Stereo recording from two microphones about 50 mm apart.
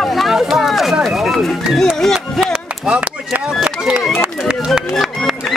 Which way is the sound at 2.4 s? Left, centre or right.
Centre.